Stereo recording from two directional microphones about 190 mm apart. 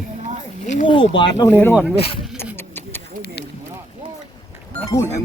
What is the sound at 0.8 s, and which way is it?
Speech, 25° left (ahead or behind).